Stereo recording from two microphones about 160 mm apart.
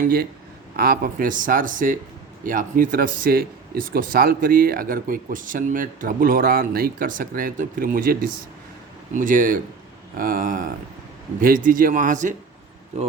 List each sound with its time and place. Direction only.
0.0 s speech: 70° right (ahead or behind); by 12.3 s 55° right (ahead or behind)